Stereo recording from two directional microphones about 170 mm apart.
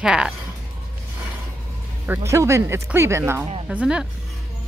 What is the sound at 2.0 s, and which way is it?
Speech, 15° right (ahead or behind).